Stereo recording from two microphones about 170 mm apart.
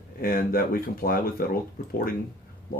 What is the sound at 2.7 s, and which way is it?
Speech, 60° left (ahead or behind).